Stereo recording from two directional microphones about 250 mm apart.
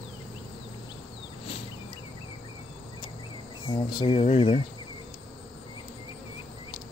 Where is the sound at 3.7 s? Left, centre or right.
Centre.